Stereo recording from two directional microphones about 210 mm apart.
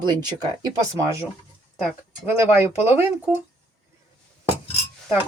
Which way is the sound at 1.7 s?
5° right (ahead or behind).